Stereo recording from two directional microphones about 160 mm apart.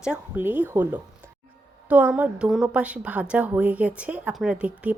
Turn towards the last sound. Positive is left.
turn(degrees=-5)  # may be behind; listen again after turning